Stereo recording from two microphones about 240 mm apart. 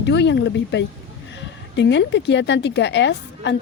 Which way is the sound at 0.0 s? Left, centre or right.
Left.